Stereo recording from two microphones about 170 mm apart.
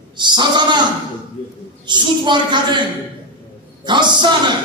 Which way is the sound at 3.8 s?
25° right (ahead or behind).